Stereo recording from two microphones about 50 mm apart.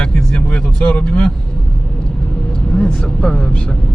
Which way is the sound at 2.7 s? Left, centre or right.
Centre.